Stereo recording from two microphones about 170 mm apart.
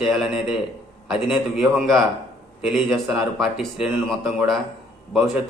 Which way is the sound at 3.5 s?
5° right (ahead or behind).